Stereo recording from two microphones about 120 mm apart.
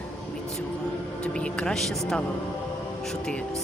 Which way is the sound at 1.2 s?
10° left (ahead or behind).